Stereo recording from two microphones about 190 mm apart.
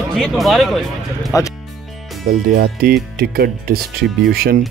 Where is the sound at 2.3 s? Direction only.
55° right (ahead or behind).